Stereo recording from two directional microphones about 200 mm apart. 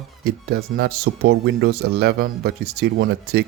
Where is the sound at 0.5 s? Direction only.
50° right (ahead or behind).